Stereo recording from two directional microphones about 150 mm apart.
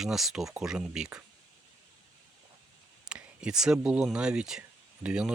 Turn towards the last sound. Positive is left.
turn(degrees=-5)  # may be behind; listen again after turning